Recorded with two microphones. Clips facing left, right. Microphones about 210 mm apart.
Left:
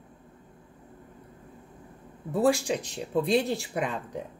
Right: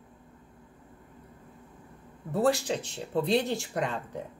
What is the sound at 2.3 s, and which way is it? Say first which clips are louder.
Speech: left 2 dB; 10° left (ahead or behind).